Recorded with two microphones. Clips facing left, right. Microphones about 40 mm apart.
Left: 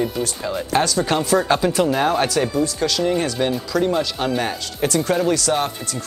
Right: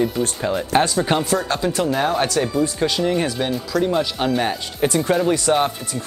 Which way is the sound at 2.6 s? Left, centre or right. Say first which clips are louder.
Right 1 dB; right.